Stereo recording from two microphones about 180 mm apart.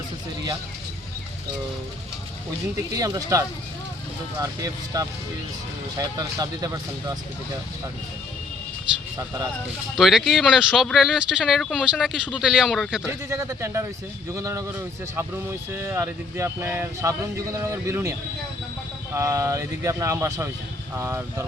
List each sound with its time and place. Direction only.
2.9 s speech: 20° right (ahead or behind)
10.0 s speech: centre (ahead or behind)
13.1 s speech: 15° right (ahead or behind)
19.1 s speech: 15° right (ahead or behind)